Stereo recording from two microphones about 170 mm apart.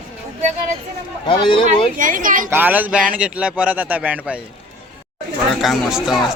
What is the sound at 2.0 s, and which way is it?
Speech, 50° right (ahead or behind).